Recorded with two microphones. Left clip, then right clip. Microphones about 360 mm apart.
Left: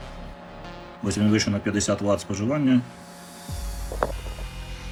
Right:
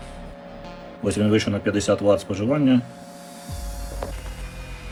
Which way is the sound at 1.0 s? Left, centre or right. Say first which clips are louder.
Right 3 dB; centre.